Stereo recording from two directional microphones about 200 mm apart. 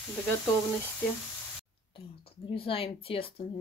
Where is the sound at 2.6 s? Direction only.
25° left (ahead or behind).